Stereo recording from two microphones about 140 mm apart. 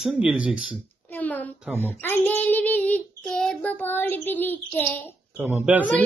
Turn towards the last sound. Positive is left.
turn(degrees=-10)  # may be behind; listen again after turning